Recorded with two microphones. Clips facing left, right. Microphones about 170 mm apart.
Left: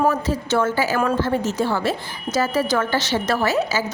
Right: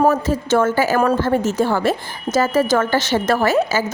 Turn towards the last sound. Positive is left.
turn(degrees=-50)  # may be behind; listen again after turning